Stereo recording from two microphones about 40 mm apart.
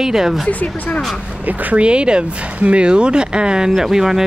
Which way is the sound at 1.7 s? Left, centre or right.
Right.